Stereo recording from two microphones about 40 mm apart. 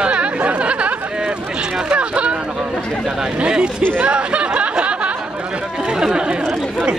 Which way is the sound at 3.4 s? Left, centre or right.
Right.